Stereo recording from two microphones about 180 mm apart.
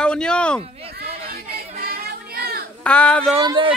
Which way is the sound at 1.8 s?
55° right (ahead or behind).